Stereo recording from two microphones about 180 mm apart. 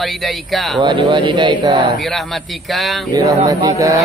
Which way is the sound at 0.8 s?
25° right (ahead or behind).